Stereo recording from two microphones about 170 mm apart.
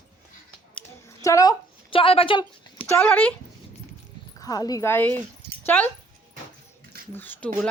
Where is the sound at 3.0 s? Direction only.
10° left (ahead or behind).